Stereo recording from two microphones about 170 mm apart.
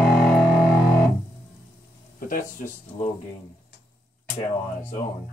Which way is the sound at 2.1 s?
55° left (ahead or behind).